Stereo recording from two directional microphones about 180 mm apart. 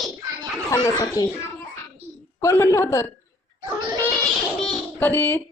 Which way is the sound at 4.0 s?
5° left (ahead or behind).